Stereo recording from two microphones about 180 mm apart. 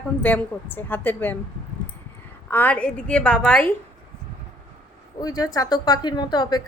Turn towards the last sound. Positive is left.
turn(degrees=25)  # may be behind; listen again after turning